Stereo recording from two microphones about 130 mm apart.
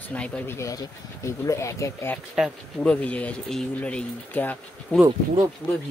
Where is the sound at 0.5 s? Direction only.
25° left (ahead or behind).